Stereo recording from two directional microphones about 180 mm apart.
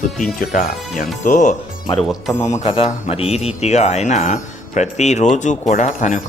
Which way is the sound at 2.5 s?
35° left (ahead or behind).